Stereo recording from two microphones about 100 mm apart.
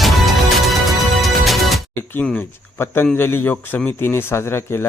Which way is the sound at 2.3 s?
20° left (ahead or behind).